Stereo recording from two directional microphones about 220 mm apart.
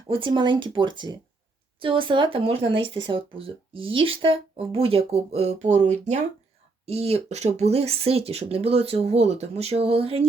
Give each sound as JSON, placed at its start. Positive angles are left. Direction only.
{"t": 0.1, "sound": "speech", "side_deg": -20}